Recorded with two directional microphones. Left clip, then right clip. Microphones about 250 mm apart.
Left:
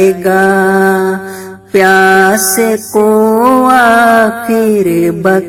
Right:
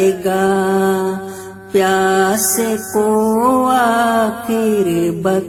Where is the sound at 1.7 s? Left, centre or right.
Left.